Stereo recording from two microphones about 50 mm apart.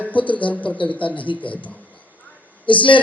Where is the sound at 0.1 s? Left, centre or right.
Left.